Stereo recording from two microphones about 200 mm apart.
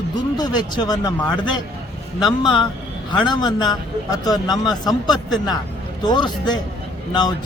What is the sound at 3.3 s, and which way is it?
A man's voice, 20° left (ahead or behind).